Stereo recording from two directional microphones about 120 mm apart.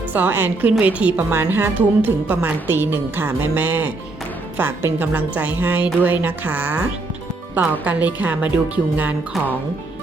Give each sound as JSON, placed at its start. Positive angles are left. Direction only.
{"t": 0.1, "sound": "a woman's voice", "side_deg": -15}